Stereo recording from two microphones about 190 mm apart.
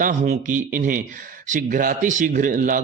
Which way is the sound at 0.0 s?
40° right (ahead or behind).